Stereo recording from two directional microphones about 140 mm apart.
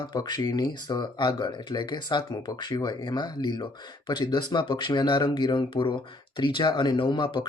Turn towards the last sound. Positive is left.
turn(degrees=35)  # may be behind; listen again after turning